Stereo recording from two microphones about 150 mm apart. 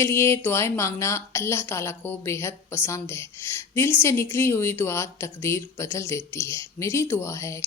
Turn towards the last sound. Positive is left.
turn(degrees=20)  # may be behind; listen again after turning